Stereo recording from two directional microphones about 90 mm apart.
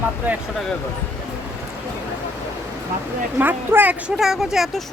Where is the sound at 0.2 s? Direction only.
20° right (ahead or behind).